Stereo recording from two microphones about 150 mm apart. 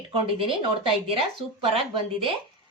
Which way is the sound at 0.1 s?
35° right (ahead or behind).